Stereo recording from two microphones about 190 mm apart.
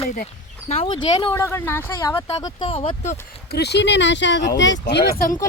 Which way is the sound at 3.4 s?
60° left (ahead or behind).